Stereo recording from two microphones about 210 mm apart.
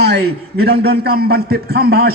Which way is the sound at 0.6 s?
50° right (ahead or behind).